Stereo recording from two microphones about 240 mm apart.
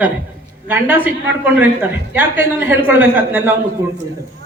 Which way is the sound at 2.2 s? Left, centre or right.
Centre.